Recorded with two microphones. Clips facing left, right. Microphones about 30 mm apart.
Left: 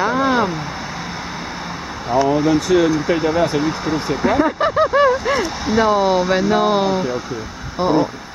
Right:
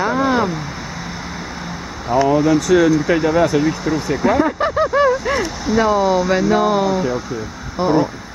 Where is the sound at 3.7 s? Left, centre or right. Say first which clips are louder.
Right 1 dB; left.